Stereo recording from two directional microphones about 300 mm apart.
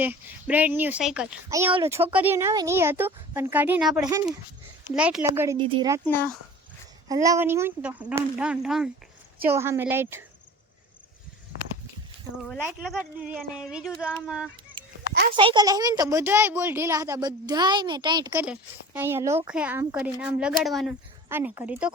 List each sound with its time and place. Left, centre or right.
0.0 s speech: centre
4.0 s speech: centre
7.1 s speech: centre
12.4 s speech: centre
15.4 s speech: centre